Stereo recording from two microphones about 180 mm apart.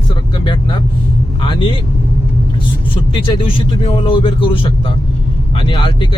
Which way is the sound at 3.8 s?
30° left (ahead or behind).